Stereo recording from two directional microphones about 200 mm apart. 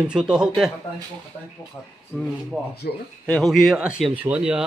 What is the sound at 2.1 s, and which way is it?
Speech, 10° left (ahead or behind).